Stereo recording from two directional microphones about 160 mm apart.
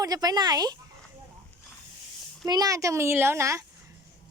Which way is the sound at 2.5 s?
25° right (ahead or behind).